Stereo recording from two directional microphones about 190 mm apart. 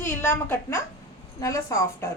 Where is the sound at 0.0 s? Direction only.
10° left (ahead or behind).